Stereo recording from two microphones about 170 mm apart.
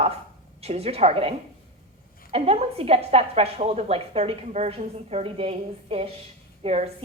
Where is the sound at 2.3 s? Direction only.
35° right (ahead or behind).